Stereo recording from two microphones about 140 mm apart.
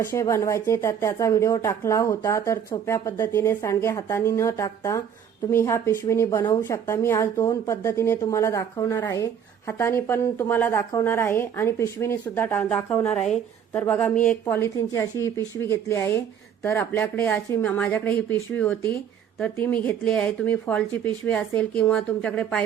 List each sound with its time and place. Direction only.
0.0 s speech: 20° left (ahead or behind)